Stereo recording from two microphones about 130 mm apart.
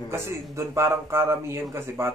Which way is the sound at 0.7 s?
20° right (ahead or behind).